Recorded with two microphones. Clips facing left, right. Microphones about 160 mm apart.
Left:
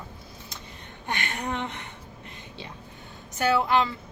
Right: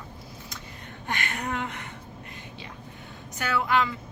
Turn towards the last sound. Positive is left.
turn(degrees=30)  # may be behind; listen again after turning